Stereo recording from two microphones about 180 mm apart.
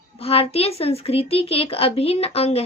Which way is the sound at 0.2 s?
35° left (ahead or behind).